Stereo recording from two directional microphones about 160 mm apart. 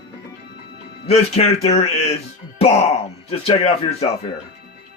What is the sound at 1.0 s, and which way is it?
A man's voice, 40° left (ahead or behind).